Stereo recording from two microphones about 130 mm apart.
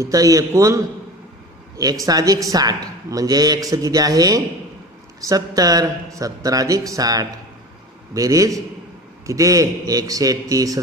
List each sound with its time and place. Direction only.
0.0 s speech: 25° right (ahead or behind)